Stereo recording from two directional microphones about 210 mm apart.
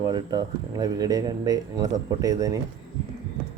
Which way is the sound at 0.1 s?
20° right (ahead or behind).